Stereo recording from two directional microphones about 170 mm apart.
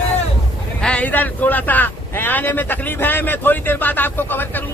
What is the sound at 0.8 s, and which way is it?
Speech, 5° left (ahead or behind).